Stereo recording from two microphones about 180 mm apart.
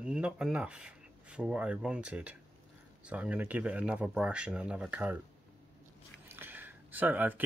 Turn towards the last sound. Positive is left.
turn(degrees=-10)  # may be behind; listen again after turning